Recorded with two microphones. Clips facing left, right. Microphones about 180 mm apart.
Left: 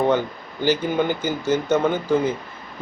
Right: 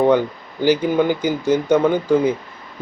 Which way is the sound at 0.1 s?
10° right (ahead or behind).